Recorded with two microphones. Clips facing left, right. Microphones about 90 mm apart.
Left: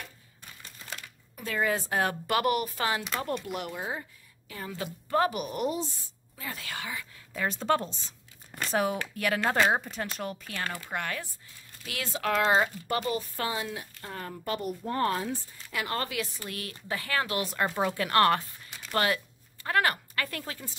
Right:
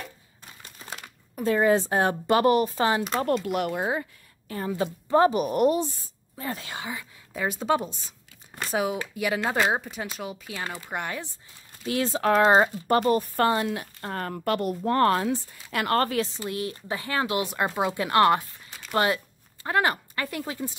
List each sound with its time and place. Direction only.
1.0 s speech: 35° right (ahead or behind)
3.3 s speech: 65° right (ahead or behind)
4.6 s speech: 30° right (ahead or behind); by 5.9 s 55° right (ahead or behind)
6.3 s speech: 30° right (ahead or behind)
11.8 s speech: 30° right (ahead or behind); by 16.1 s 60° right (ahead or behind)
16.3 s speech: 25° right (ahead or behind)